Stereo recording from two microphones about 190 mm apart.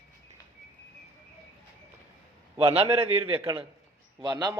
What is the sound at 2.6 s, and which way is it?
Speech, 30° right (ahead or behind).